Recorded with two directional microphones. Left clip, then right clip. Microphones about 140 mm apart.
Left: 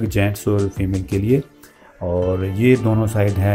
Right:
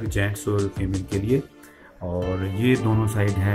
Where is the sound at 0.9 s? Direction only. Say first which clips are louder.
Left 5 dB; centre (ahead or behind).